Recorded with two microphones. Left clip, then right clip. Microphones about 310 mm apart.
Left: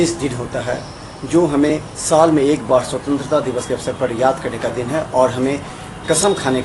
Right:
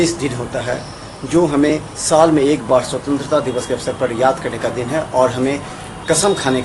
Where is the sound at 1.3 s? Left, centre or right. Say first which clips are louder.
Even; centre.